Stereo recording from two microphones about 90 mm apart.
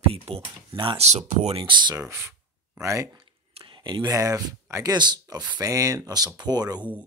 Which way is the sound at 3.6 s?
65° right (ahead or behind).